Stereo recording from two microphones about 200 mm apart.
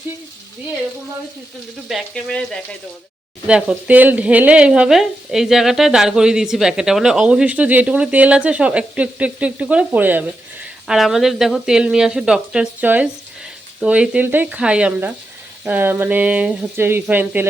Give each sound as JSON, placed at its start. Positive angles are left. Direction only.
{"t": 1.9, "sound": "speech", "side_deg": 0}